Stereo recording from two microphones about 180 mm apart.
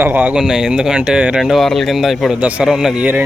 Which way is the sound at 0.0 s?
10° right (ahead or behind).